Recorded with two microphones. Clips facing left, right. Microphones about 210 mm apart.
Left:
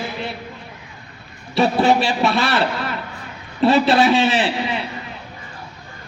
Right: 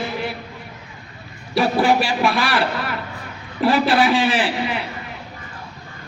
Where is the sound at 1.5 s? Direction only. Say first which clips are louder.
Left 1 dB; 25° left (ahead or behind).